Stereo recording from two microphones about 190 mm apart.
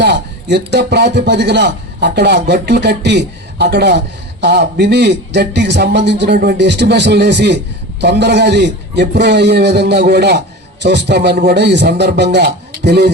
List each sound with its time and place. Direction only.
0.0 s a man's voice: 60° right (ahead or behind)